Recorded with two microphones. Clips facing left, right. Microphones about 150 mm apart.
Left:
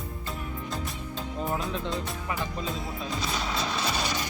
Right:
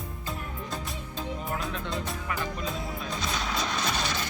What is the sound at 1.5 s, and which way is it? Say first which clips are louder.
Music: left 2 dB; 30° left (ahead or behind).